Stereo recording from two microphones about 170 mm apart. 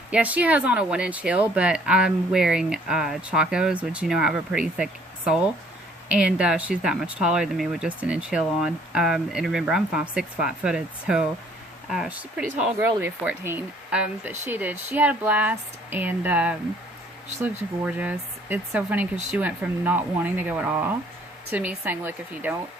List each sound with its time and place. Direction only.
0.1 s speech: 10° right (ahead or behind)